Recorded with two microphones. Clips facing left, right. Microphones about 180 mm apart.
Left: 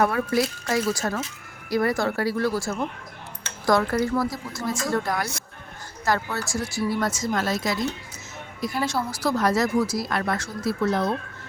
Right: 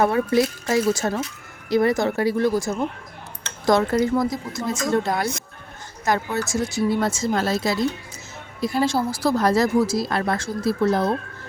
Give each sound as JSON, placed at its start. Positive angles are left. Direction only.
{"t": 0.0, "sound": "speech", "side_deg": -25}